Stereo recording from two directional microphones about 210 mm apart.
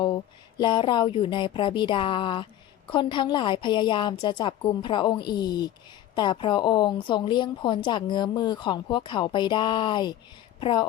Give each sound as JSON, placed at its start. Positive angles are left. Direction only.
{"t": 0.6, "sound": "a woman's voice", "side_deg": 20}